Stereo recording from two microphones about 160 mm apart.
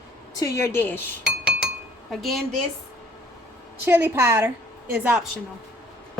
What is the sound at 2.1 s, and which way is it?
Speech, centre (ahead or behind).